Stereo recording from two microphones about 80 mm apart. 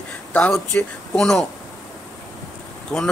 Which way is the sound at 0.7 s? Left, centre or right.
Centre.